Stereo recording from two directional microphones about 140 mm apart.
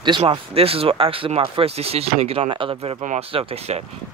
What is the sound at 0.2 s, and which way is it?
Speech, 45° right (ahead or behind).